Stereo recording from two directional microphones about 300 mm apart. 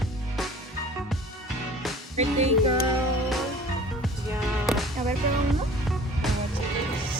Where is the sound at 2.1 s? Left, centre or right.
Right.